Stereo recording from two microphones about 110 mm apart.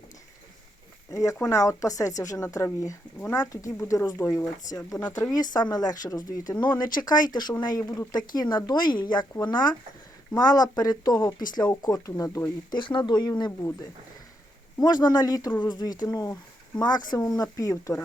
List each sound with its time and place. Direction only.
1.1 s speech: 30° left (ahead or behind)
3.3 s speech: 30° left (ahead or behind)
12.7 s speech: 45° left (ahead or behind)
14.8 s speech: 40° left (ahead or behind)